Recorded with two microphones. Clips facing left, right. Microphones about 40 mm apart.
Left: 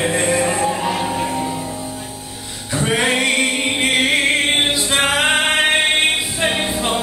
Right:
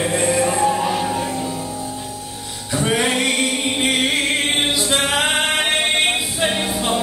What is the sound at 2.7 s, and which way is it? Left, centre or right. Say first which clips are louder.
Music: even; centre.